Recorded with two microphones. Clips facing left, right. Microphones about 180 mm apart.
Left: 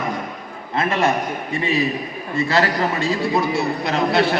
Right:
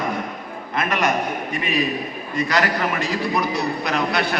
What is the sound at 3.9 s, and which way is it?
Speech, 25° left (ahead or behind).